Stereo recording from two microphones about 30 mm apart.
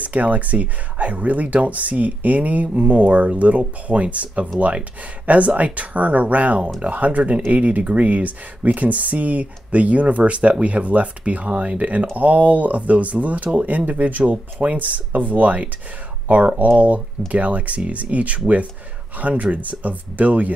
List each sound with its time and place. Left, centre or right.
0.0 s speech: right
2.7 s speech: right
14.3 s speech: right